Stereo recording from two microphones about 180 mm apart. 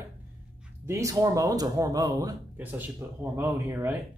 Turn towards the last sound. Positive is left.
turn(degrees=-15)  # may be behind; listen again after turning